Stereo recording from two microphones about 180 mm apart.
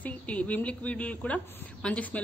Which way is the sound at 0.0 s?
5° left (ahead or behind).